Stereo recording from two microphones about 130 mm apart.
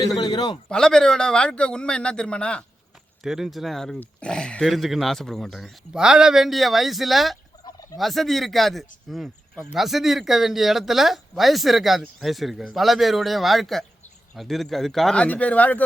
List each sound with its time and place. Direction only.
0.2 s a man's voice: 30° left (ahead or behind)
0.7 s a man's voice: 5° left (ahead or behind)